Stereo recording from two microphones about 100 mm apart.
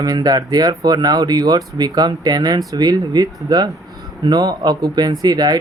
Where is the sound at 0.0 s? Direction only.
40° right (ahead or behind).